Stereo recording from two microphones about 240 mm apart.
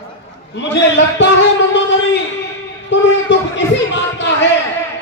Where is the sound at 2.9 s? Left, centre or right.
Left.